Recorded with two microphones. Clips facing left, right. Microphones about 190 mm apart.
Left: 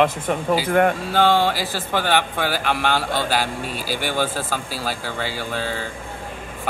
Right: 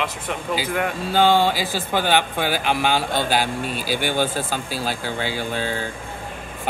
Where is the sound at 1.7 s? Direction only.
Centre (ahead or behind).